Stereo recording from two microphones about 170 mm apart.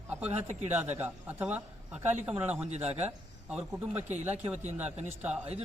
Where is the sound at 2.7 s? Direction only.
40° right (ahead or behind).